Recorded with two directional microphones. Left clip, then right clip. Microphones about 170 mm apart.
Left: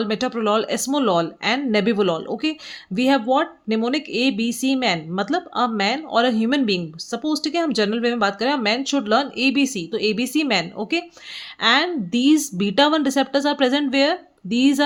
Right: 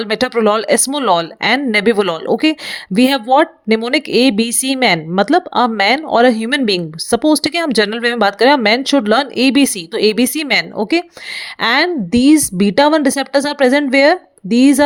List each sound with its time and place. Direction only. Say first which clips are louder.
0.0 s a woman's voice: right 8 dB; 45° right (ahead or behind)